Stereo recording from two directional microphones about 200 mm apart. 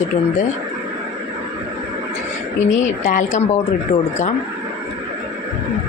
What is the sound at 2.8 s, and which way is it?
Speech, 40° left (ahead or behind).